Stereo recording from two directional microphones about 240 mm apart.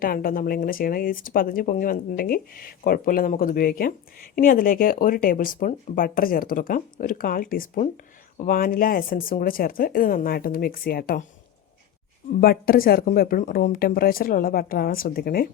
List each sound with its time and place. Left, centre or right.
0.0 s speech: left
12.4 s speech: left